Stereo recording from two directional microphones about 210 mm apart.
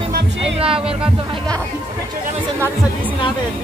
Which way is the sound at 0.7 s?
25° right (ahead or behind).